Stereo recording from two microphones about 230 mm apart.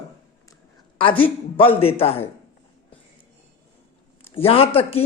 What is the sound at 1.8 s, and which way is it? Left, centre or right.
Speech, left.